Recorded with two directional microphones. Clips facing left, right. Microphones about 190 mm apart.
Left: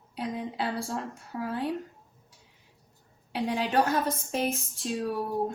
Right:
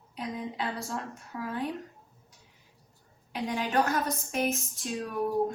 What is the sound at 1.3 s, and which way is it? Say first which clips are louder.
Speech: left 2 dB; 30° left (ahead or behind).